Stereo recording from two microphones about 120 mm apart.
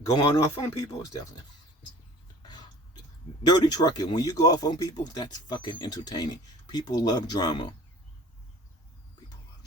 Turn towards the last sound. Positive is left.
turn(degrees=40)  # may be behind; listen again after turning